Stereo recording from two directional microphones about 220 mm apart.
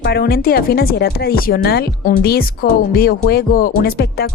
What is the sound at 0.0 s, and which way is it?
A woman's voice, 45° left (ahead or behind).